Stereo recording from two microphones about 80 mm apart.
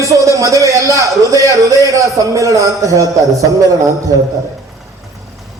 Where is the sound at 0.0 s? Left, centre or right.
Right.